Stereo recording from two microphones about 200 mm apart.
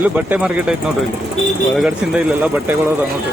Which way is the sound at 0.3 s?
5° right (ahead or behind).